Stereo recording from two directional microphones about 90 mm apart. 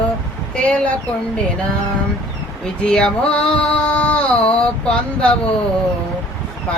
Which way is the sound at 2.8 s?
10° left (ahead or behind).